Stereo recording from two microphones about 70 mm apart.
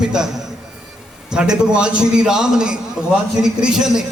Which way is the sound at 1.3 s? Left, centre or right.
Centre.